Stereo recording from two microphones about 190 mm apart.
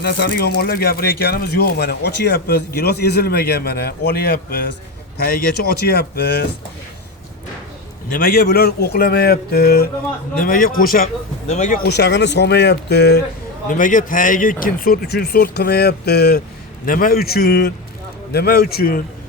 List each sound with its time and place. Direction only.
0.0 s speech: 60° left (ahead or behind)
8.1 s speech: 50° left (ahead or behind)
13.7 s speech: 45° left (ahead or behind)